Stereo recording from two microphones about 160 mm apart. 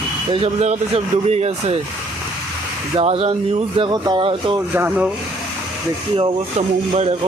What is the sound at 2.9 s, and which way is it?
Speech, 35° right (ahead or behind).